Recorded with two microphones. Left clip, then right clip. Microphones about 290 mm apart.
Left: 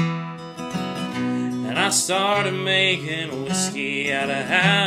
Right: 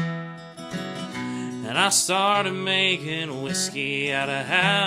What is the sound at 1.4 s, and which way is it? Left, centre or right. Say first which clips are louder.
Music: right 1 dB; right.